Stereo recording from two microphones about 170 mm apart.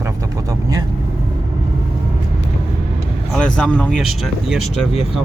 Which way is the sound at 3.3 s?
5° left (ahead or behind).